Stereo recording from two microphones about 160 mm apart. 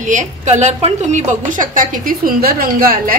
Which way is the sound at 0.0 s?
50° right (ahead or behind).